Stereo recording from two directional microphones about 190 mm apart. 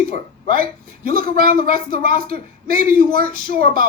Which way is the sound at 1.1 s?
50° right (ahead or behind).